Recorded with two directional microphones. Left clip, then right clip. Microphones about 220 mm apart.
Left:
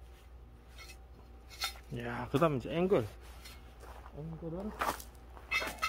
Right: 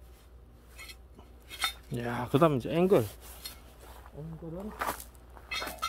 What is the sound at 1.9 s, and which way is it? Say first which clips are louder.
Speech: right 4 dB; 45° right (ahead or behind).